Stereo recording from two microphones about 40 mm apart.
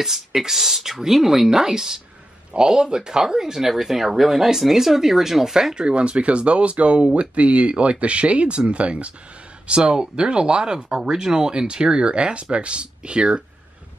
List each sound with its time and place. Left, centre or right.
0.0 s speech: centre
5.9 s speech: right